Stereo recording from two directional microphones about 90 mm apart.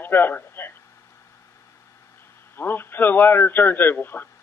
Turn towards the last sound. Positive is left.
turn(degrees=20)  # may be behind; listen again after turning